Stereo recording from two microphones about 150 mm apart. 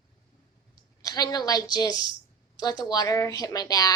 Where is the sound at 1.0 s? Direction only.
25° left (ahead or behind).